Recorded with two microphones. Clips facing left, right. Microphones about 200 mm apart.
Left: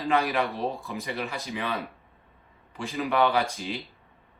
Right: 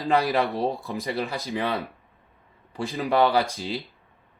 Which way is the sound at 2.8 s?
35° right (ahead or behind).